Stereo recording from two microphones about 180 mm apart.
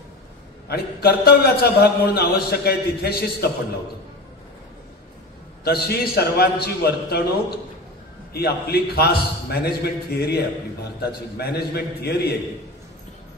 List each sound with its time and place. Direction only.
0.7 s a man's voice: 60° left (ahead or behind)
5.6 s a man's voice: 60° left (ahead or behind)
8.3 s a man's voice: 60° left (ahead or behind)